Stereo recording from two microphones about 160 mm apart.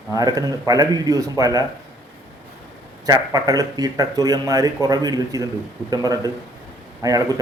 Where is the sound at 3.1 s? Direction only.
25° right (ahead or behind).